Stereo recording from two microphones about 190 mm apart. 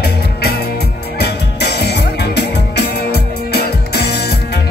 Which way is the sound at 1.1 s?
60° left (ahead or behind).